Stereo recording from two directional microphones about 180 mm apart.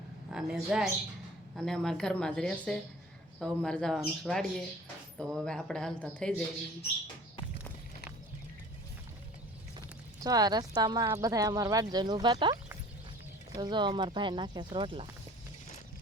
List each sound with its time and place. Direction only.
0.3 s a woman's voice: 5° right (ahead or behind)
10.2 s speech: 20° right (ahead or behind)
13.6 s speech: 25° right (ahead or behind)